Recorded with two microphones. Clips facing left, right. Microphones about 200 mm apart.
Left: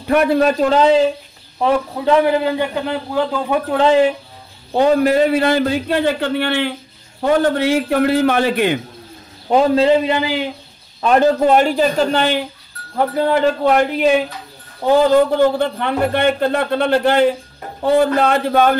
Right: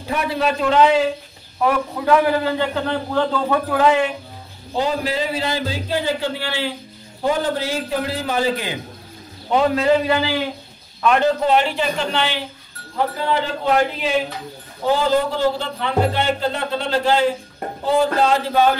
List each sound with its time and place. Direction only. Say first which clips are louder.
0.1 s a man's voice: left 7 dB; 55° left (ahead or behind); by 3.6 s 10° left (ahead or behind)
3.7 s a man's voice: left 5 dB; 30° left (ahead or behind)
4.7 s speech: left 8 dB; 60° left (ahead or behind)
9.5 s a man's voice: left 4 dB; 35° left (ahead or behind)
11.0 s speech: left 4 dB; 40° left (ahead or behind)
15.3 s speech: left 6 dB; 55° left (ahead or behind)